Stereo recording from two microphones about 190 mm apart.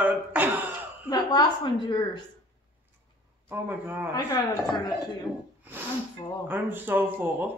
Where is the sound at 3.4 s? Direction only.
10° right (ahead or behind).